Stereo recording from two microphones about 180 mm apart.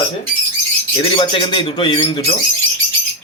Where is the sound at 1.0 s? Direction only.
30° left (ahead or behind).